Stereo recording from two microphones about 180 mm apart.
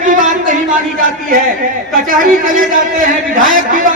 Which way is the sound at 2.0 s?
50° right (ahead or behind).